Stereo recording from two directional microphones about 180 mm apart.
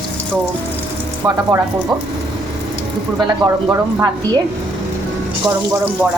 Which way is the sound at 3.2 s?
20° right (ahead or behind).